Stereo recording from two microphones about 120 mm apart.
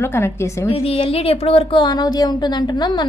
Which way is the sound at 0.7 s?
55° left (ahead or behind).